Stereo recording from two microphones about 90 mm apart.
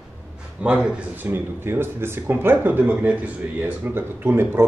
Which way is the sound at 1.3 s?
25° right (ahead or behind).